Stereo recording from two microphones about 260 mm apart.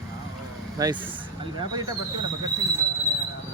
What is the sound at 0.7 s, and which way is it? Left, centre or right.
Speech, centre.